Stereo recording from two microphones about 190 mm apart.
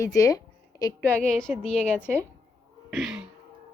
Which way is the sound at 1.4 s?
5° left (ahead or behind).